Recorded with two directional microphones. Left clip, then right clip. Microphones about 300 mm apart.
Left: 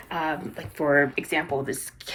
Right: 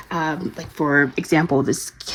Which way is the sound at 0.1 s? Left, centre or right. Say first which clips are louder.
Right 4 dB; centre.